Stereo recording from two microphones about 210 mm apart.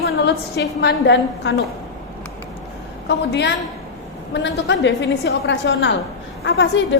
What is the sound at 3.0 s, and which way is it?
A woman's voice, 55° left (ahead or behind).